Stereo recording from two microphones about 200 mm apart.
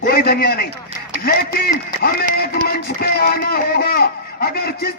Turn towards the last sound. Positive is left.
turn(degrees=50)  # may be behind; listen again after turning